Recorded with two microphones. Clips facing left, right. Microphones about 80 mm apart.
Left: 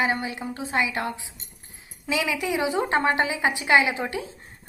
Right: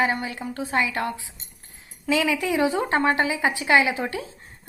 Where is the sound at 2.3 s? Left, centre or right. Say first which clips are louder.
Right 3 dB; centre.